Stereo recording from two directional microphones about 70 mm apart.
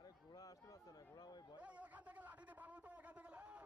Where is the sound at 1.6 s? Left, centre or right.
Centre.